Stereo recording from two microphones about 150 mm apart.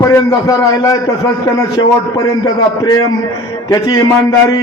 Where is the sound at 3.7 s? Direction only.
25° left (ahead or behind).